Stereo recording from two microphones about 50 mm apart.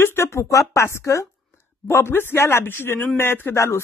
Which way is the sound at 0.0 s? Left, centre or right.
Left.